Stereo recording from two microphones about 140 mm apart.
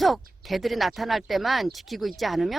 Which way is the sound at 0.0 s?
Centre (ahead or behind).